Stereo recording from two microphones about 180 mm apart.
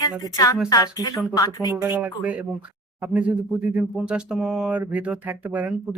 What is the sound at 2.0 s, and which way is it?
Speech, 10° right (ahead or behind).